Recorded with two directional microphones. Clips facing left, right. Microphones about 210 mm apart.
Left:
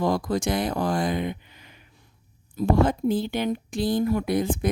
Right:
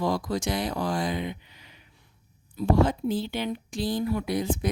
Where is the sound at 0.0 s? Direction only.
50° left (ahead or behind).